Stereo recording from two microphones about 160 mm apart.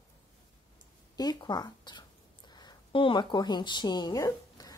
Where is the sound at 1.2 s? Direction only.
25° left (ahead or behind).